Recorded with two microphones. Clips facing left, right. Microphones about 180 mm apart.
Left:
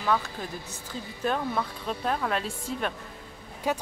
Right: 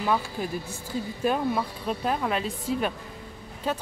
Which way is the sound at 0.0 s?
15° right (ahead or behind).